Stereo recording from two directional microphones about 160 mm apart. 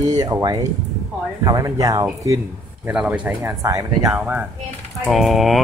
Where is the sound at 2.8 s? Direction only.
5° right (ahead or behind); by 4.1 s 20° right (ahead or behind).